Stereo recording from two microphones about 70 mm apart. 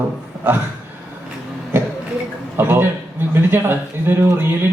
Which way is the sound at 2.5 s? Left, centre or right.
Right.